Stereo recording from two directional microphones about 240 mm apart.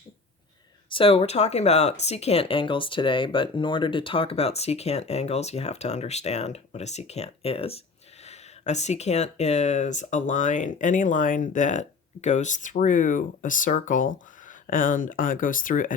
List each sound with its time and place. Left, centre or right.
0.9 s speech: left